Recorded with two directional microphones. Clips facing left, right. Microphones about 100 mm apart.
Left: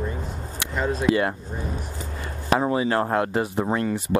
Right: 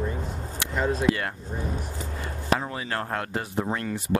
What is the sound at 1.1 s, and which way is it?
Speech, 15° left (ahead or behind).